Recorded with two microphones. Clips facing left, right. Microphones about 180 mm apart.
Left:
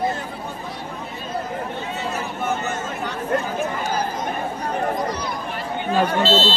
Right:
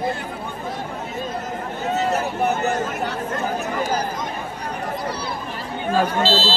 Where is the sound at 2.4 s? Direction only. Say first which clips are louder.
Right 3 dB; 40° right (ahead or behind).